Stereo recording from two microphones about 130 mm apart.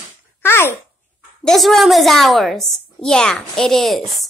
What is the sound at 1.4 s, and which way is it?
Child singing, centre (ahead or behind).